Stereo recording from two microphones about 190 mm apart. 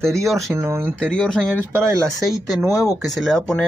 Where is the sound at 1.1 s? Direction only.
Centre (ahead or behind).